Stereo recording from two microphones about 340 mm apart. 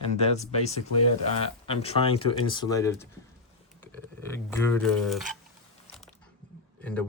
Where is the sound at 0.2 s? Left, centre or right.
Centre.